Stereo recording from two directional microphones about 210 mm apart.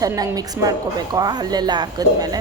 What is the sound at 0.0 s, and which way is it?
A man's voice, 15° right (ahead or behind).